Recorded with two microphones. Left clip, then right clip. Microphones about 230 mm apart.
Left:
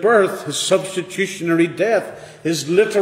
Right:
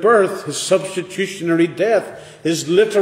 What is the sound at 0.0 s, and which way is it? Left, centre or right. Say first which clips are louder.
A man's voice: right 1 dB; centre.